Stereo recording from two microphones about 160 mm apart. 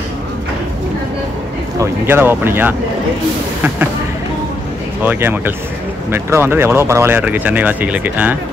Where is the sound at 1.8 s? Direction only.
15° right (ahead or behind).